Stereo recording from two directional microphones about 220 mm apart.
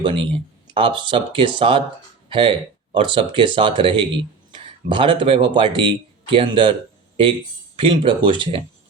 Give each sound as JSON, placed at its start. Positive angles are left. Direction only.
{"t": 0.0, "sound": "speech", "side_deg": -25}
{"t": 7.8, "sound": "speech", "side_deg": -20}